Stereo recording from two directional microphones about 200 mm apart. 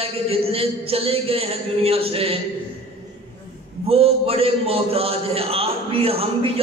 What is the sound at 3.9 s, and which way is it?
A man's voice, 30° right (ahead or behind).